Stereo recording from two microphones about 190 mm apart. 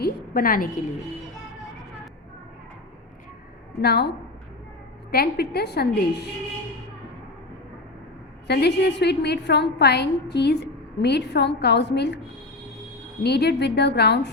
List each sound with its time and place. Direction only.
0.0 s a sound: 50° left (ahead or behind)
3.8 s a woman's voice: 55° left (ahead or behind)
5.1 s a woman's voice: 55° left (ahead or behind)
8.4 s a woman's voice: 60° left (ahead or behind)
13.2 s a woman's voice: 60° left (ahead or behind)